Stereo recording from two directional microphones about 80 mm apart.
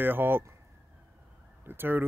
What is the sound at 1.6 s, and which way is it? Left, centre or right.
Speech, right.